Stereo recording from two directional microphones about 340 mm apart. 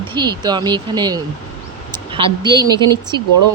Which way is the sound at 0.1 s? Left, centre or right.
Centre.